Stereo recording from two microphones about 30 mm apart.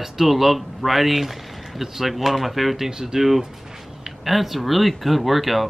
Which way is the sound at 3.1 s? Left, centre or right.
Centre.